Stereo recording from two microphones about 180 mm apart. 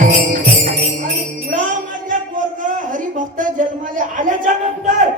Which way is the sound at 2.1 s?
45° right (ahead or behind).